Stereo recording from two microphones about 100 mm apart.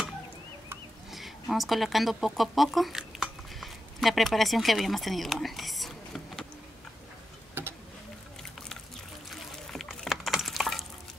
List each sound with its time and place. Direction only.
1.1 s speech: centre (ahead or behind)
7.6 s a sound: 20° right (ahead or behind)
9.3 s liquid: 5° left (ahead or behind)